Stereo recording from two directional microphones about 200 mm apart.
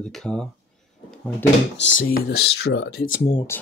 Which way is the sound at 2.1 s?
55° left (ahead or behind).